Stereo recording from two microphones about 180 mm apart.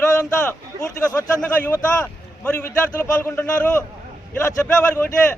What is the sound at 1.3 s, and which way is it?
A man's voice, 5° left (ahead or behind).